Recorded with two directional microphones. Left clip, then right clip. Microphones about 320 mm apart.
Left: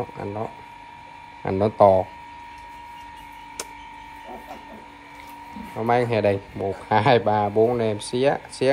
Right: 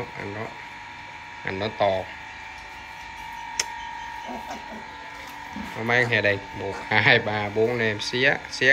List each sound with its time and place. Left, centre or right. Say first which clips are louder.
1.4 s speech: left 7 dB; centre
3.6 s tick-tock: right 7 dB; centre
5.8 s speech: left 1 dB; centre